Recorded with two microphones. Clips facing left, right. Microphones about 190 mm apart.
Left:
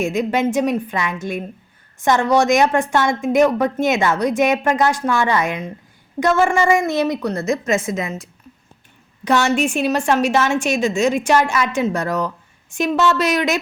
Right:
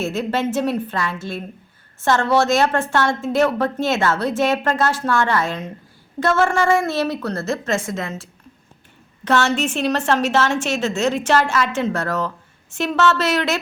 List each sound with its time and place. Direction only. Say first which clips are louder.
0.0 s a woman's voice: left 3 dB; 15° left (ahead or behind)